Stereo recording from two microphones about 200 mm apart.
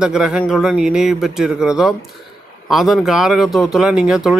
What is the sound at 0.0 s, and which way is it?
Speech, 5° right (ahead or behind).